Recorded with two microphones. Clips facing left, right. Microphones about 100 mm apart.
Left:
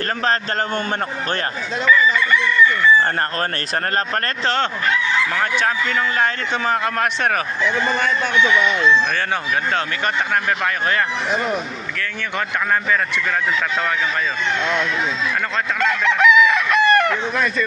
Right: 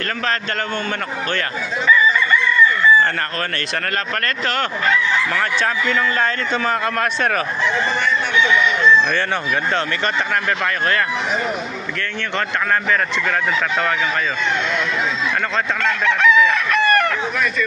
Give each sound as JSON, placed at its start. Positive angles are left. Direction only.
{"t": 5.3, "sound": "a man's voice", "side_deg": 10}
{"t": 15.8, "sound": "chicken", "side_deg": 15}